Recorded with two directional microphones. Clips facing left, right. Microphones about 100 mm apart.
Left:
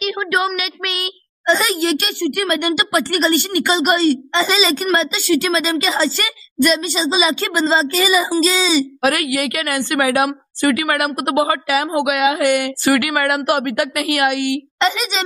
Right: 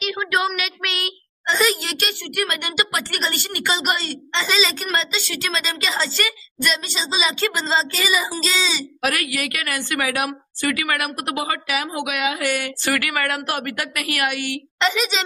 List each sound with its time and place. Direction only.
0.2 s speech: 5° left (ahead or behind)
9.0 s a woman's voice: 25° left (ahead or behind)
14.8 s speech: centre (ahead or behind)